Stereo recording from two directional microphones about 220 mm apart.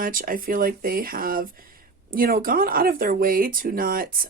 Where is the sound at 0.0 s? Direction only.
40° right (ahead or behind).